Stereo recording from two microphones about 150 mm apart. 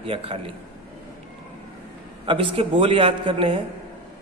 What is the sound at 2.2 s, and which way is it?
A man's voice, 35° right (ahead or behind).